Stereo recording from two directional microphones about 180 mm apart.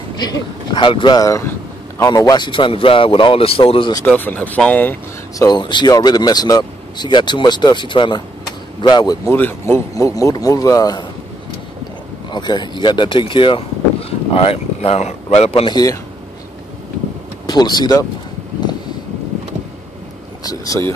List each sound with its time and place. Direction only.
0.2 s speech: 25° left (ahead or behind)
3.9 s speech: 10° left (ahead or behind)
5.4 s speech: 25° left (ahead or behind)
12.3 s speech: 25° left (ahead or behind)
17.5 s speech: 25° left (ahead or behind)
20.4 s speech: 20° left (ahead or behind)